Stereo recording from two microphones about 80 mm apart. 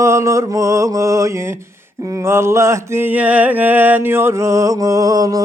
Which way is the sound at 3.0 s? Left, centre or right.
Centre.